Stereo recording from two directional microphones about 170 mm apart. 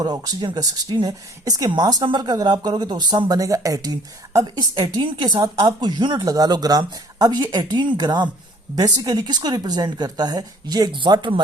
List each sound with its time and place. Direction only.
0.0 s speech: 25° right (ahead or behind)